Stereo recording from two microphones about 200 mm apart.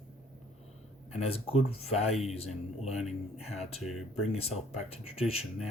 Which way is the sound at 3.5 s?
30° left (ahead or behind).